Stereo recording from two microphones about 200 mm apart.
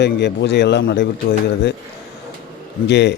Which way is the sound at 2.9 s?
60° left (ahead or behind).